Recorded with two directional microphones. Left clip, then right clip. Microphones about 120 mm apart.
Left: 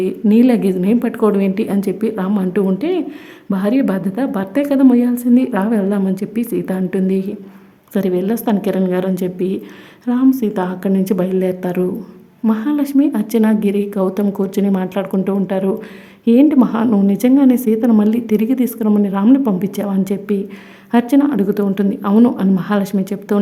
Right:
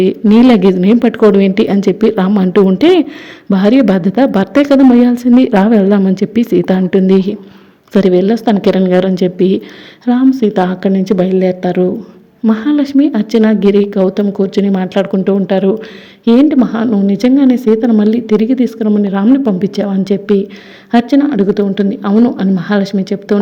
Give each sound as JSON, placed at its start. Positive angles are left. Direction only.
{"t": 0.0, "sound": "a woman's voice", "side_deg": -25}
{"t": 2.7, "sound": "a woman's voice", "side_deg": -50}
{"t": 3.5, "sound": "a woman's voice", "side_deg": -25}
{"t": 11.2, "sound": "a woman's voice", "side_deg": -10}
{"t": 12.5, "sound": "a woman's voice", "side_deg": -25}
{"t": 14.6, "sound": "a woman's voice", "side_deg": -15}
{"t": 18.9, "sound": "a woman's voice", "side_deg": -15}
{"t": 22.1, "sound": "speech", "side_deg": 10}
{"t": 22.5, "sound": "a woman's voice", "side_deg": -15}